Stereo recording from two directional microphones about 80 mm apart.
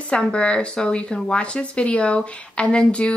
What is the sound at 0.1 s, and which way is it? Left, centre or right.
Speech, centre.